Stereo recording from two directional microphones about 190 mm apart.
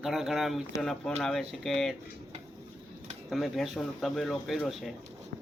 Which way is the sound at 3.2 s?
Centre (ahead or behind).